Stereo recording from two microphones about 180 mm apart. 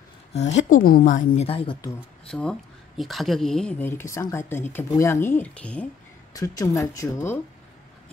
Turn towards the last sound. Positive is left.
turn(degrees=15)  # may be behind; listen again after turning